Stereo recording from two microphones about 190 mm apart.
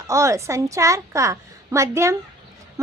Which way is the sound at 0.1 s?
15° right (ahead or behind).